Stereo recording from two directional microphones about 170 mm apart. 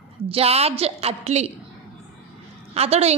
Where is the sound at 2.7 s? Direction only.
40° right (ahead or behind).